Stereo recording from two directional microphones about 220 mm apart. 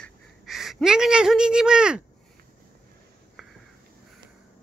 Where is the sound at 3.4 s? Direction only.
Centre (ahead or behind).